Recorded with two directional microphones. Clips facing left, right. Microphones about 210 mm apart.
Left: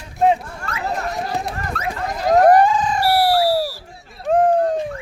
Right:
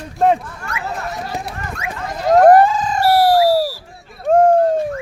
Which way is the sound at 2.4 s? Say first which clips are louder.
Right 3 dB; 45° right (ahead or behind).